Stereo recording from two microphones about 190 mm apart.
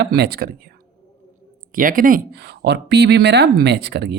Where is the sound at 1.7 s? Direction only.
45° right (ahead or behind).